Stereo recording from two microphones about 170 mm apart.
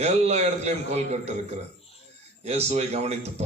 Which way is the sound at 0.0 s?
40° right (ahead or behind).